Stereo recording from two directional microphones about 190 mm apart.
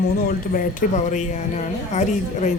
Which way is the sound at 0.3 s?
45° left (ahead or behind).